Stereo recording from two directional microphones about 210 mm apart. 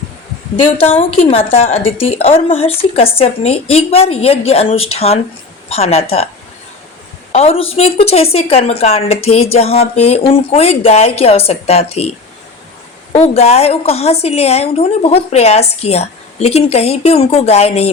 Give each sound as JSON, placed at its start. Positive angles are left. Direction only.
{"t": 0.8, "sound": "a woman's voice", "side_deg": 30}
{"t": 7.3, "sound": "a woman's voice", "side_deg": 30}
{"t": 13.1, "sound": "a woman's voice", "side_deg": 30}